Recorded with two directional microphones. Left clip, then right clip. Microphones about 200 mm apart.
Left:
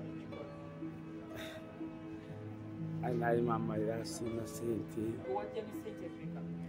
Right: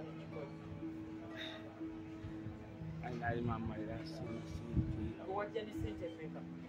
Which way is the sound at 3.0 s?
55° left (ahead or behind).